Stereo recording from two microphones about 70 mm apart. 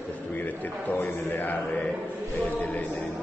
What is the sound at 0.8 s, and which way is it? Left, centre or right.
Speech, left.